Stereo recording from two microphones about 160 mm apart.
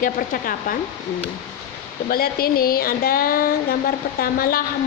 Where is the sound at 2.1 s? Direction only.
70° left (ahead or behind).